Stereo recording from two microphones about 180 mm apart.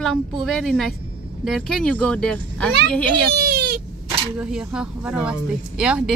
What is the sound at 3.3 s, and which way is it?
Goat, 60° right (ahead or behind).